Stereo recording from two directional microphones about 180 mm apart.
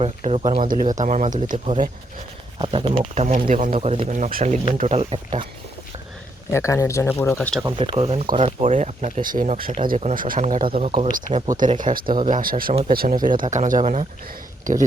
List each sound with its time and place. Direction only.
0.0 s speech: 35° right (ahead or behind)
0.6 s speech: 45° right (ahead or behind)
2.6 s speech: 30° right (ahead or behind)
4.1 s speech: 50° right (ahead or behind); by 5.5 s 30° right (ahead or behind)
6.5 s speech: 15° left (ahead or behind)
7.6 s speech: 30° right (ahead or behind); by 10.6 s 45° right (ahead or behind)
10.6 s speech: 35° right (ahead or behind)
11.8 s speech: 50° right (ahead or behind)